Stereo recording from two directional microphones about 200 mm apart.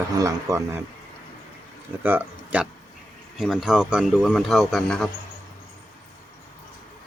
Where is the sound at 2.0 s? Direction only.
10° right (ahead or behind).